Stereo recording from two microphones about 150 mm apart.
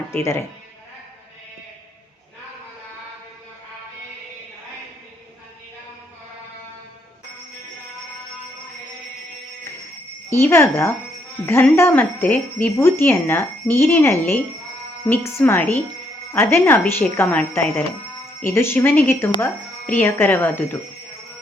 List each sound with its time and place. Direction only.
0.1 s speech: 20° left (ahead or behind)
10.2 s speech: 15° left (ahead or behind)